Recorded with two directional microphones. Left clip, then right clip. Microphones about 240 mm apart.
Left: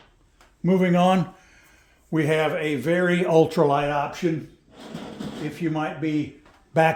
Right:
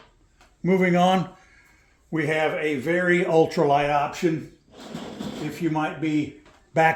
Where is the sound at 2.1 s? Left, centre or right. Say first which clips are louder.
Left 1 dB; left.